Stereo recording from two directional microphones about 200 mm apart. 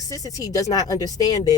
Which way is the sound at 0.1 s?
15° left (ahead or behind).